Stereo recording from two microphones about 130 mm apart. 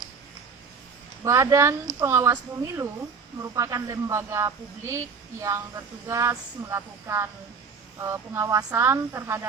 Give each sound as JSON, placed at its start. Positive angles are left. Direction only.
{"t": 1.2, "sound": "speech", "side_deg": -25}